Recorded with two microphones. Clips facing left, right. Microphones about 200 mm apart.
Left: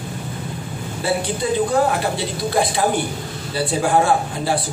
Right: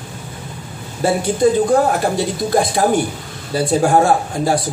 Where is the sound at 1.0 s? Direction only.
45° right (ahead or behind).